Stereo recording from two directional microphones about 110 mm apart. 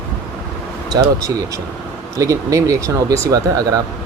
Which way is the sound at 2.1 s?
30° right (ahead or behind).